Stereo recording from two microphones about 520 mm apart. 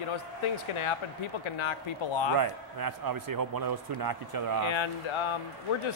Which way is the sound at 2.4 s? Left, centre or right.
Right.